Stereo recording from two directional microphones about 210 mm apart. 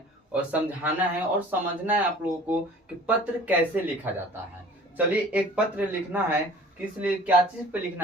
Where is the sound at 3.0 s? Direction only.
5° right (ahead or behind).